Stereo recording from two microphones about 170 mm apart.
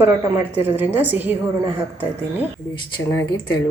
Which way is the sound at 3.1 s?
20° left (ahead or behind).